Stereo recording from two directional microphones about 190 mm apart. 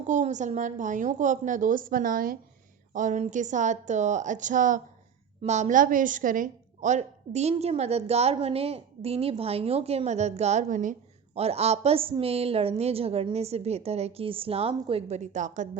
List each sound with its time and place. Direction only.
0.1 s a woman's voice: 40° right (ahead or behind)